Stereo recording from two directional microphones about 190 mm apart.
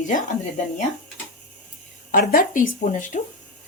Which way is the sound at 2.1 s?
45° left (ahead or behind).